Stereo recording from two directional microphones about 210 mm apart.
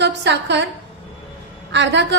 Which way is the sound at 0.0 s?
55° right (ahead or behind).